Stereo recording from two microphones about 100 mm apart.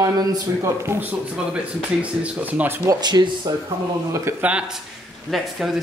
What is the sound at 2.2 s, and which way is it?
Speech, 15° right (ahead or behind).